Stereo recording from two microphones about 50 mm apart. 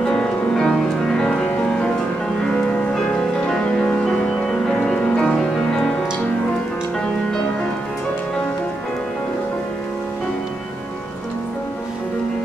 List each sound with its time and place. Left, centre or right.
0.0 s music: centre
2.9 s music: centre